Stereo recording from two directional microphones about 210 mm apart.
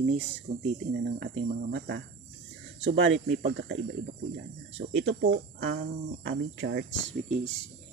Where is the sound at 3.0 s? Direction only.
65° right (ahead or behind).